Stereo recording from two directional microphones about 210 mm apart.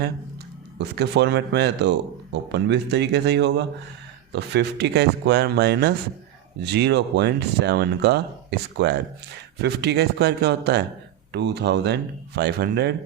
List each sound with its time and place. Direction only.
0.8 s speech: 55° right (ahead or behind)